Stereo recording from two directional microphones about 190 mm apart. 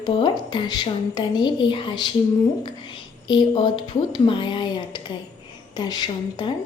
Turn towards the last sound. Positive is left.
turn(degrees=20)  # may be behind; listen again after turning